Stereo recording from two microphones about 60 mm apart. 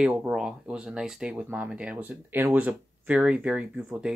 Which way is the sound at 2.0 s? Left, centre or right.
Right.